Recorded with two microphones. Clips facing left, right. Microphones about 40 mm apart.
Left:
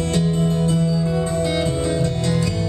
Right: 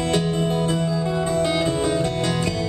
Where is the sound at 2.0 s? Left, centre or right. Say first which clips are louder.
Left 1 dB; right.